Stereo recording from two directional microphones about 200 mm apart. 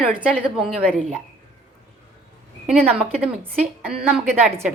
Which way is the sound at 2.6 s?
5° right (ahead or behind).